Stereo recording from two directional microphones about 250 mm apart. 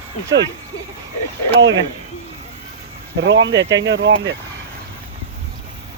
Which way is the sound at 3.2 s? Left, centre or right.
Right.